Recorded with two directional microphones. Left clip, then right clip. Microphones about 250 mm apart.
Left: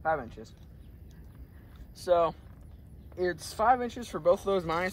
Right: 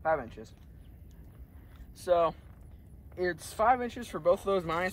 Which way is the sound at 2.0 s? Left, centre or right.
Centre.